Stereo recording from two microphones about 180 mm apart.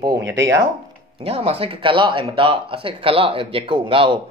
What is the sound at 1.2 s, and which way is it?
Speech, 30° right (ahead or behind).